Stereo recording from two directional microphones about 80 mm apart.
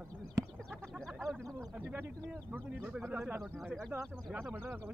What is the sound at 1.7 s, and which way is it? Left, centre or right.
Speech, right.